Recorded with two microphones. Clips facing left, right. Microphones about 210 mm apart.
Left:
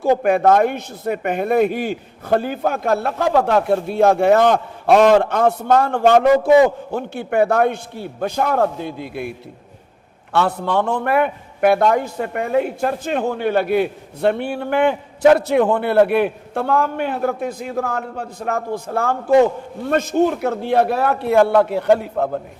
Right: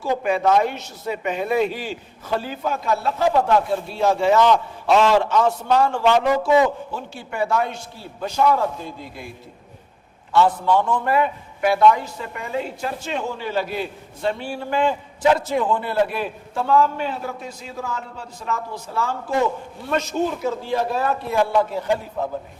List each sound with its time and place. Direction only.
0.0 s a man's voice: 55° left (ahead or behind)
10.3 s a man's voice: 65° left (ahead or behind)